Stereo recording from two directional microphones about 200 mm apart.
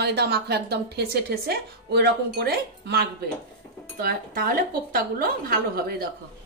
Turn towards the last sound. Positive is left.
turn(degrees=-50)  # may be behind; listen again after turning